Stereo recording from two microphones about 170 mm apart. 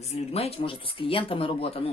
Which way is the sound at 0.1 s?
35° left (ahead or behind).